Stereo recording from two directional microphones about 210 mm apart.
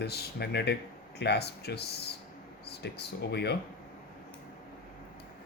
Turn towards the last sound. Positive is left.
turn(degrees=50)  # may be behind; listen again after turning